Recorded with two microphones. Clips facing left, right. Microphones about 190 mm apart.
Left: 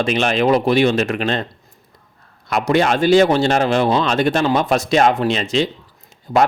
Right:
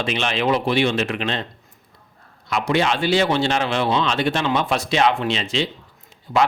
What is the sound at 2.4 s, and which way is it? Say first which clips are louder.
Speech: left 4 dB; 45° left (ahead or behind).